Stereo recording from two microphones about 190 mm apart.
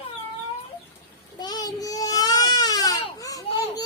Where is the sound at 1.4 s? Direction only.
20° left (ahead or behind).